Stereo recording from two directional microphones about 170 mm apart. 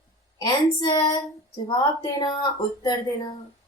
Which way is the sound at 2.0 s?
25° left (ahead or behind).